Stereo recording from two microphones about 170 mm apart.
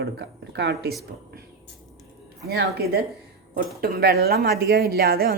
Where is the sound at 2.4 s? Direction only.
70° right (ahead or behind).